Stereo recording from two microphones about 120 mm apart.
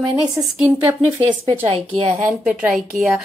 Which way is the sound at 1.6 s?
55° right (ahead or behind).